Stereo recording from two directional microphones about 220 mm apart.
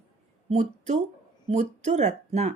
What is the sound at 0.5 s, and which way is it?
Speech, 30° right (ahead or behind).